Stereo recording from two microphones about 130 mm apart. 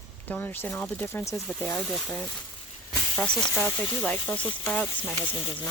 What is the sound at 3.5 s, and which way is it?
Speech, 10° left (ahead or behind).